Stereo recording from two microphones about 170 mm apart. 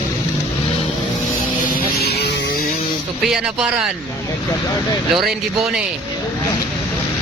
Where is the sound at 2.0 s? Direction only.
70° left (ahead or behind).